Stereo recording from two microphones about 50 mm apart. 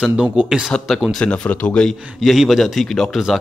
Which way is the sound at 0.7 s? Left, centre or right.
Centre.